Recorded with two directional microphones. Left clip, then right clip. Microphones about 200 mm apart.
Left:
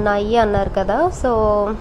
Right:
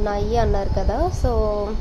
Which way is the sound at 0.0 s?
15° left (ahead or behind).